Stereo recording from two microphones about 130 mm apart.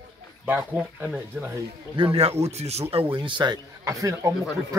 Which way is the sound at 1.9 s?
45° right (ahead or behind).